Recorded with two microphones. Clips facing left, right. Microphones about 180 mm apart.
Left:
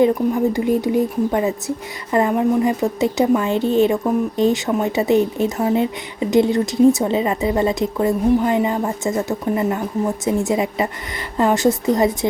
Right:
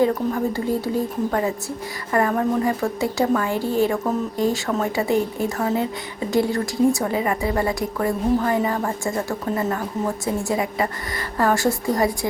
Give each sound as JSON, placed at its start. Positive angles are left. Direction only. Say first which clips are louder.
{"t": 0.0, "sound": "speech", "louder": "left 4 dB", "side_deg": 15}